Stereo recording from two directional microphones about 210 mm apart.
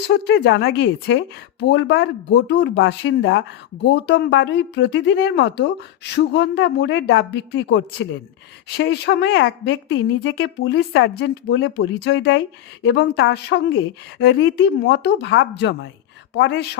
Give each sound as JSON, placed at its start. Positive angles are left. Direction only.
{"t": 0.1, "sound": "speech", "side_deg": 55}